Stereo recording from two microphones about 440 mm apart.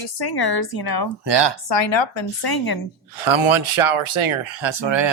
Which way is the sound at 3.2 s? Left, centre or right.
Right.